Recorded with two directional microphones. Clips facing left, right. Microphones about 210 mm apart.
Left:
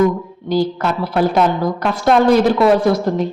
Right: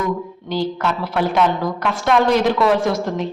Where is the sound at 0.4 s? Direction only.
40° left (ahead or behind).